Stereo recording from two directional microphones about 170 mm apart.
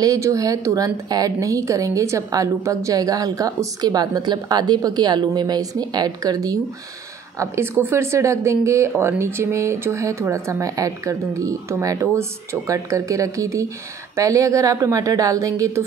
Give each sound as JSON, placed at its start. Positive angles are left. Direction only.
{"t": 0.0, "sound": "speech", "side_deg": -20}